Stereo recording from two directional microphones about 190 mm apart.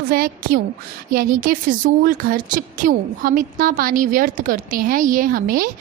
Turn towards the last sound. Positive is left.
turn(degrees=-50)  # may be behind; listen again after turning